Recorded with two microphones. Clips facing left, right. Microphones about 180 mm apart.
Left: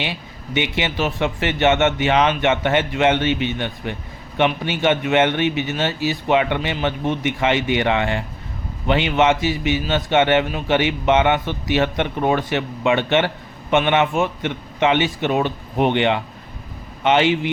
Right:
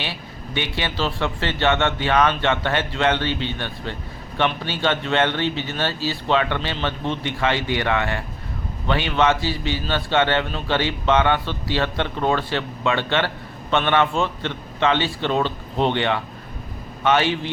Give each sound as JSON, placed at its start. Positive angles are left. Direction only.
{"t": 0.0, "sound": "a man's voice", "side_deg": 20}